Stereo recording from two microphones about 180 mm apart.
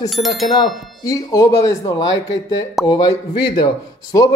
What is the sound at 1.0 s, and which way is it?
Speech, 20° left (ahead or behind).